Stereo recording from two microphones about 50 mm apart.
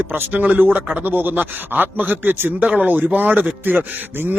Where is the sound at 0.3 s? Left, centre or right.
Right.